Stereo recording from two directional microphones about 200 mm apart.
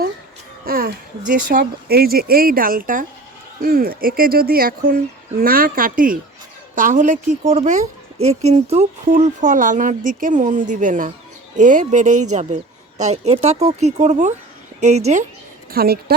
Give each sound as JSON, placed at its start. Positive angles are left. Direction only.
{"t": 0.6, "sound": "a sound", "side_deg": -45}
{"t": 1.3, "sound": "a woman's voice", "side_deg": -45}
{"t": 15.7, "sound": "speech", "side_deg": -50}